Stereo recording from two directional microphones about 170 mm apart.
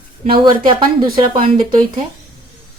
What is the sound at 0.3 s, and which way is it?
Speech, 30° right (ahead or behind).